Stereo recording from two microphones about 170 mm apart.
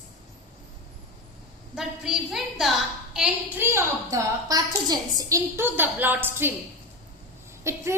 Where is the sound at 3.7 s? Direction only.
15° right (ahead or behind).